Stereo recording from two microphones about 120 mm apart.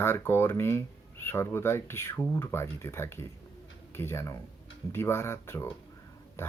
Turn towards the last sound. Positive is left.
turn(degrees=20)  # may be behind; listen again after turning